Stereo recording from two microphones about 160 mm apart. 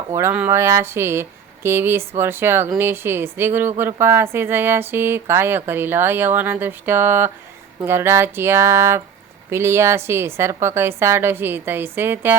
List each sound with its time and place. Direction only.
0.1 s speech: 15° right (ahead or behind)